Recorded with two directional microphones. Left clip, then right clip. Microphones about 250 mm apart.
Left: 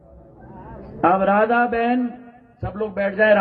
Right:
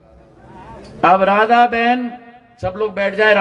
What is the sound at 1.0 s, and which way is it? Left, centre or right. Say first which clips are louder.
A man's voice: right 5 dB; right.